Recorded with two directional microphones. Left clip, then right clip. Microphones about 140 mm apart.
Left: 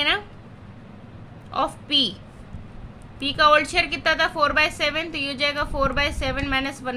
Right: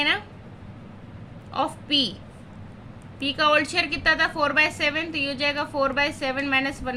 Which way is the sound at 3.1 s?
25° left (ahead or behind).